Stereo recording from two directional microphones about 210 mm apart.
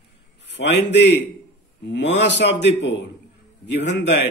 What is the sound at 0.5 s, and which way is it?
A man's voice, 55° left (ahead or behind).